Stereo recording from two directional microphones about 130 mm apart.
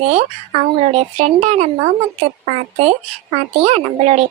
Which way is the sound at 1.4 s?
55° right (ahead or behind).